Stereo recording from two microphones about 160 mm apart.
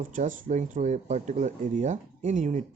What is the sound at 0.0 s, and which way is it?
Speech, 55° right (ahead or behind).